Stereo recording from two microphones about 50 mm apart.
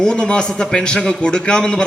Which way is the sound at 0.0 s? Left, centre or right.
Centre.